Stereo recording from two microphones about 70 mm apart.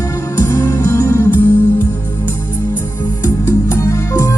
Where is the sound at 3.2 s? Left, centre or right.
Left.